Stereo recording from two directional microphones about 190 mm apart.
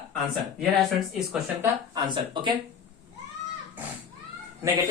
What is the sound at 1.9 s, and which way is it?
Speech, 25° right (ahead or behind).